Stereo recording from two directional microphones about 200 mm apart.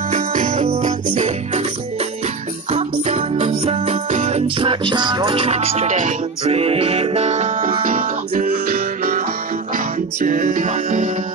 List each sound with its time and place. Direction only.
0.1 s music: 40° right (ahead or behind)
10.2 s music: 40° right (ahead or behind)